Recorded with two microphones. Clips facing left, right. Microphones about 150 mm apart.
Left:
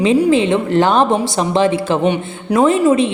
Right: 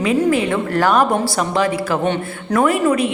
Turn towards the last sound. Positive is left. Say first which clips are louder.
# left 4 dB
turn(degrees=25)  # may be behind; listen again after turning